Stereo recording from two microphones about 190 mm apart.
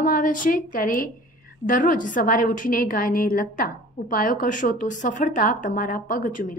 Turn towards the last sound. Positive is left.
turn(degrees=45)  # may be behind; listen again after turning